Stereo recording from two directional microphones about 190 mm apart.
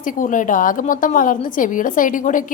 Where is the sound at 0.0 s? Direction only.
45° left (ahead or behind).